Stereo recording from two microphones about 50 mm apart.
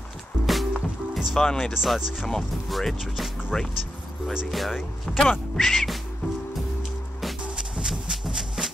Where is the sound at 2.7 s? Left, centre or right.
Centre.